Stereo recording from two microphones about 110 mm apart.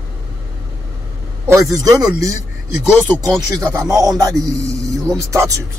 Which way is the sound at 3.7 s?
30° right (ahead or behind).